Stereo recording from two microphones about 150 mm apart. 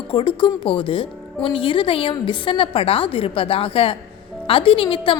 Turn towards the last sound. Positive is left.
turn(degrees=35)  # may be behind; listen again after turning